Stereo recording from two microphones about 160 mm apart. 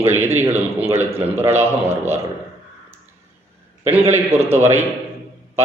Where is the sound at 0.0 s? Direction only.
15° right (ahead or behind).